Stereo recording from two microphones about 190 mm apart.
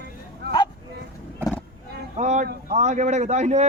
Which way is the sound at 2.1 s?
40° right (ahead or behind).